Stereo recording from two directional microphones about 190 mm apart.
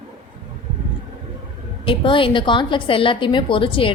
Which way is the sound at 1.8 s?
25° left (ahead or behind).